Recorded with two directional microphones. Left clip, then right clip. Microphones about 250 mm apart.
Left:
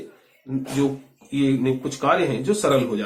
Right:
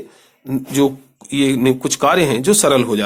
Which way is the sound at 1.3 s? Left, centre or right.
Right.